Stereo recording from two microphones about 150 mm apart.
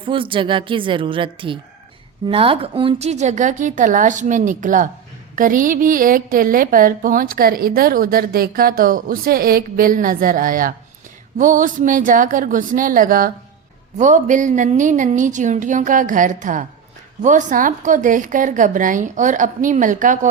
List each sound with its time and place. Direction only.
0.0 s a woman's voice: 35° right (ahead or behind); by 13.3 s 70° right (ahead or behind)
14.0 s a woman's voice: 55° right (ahead or behind)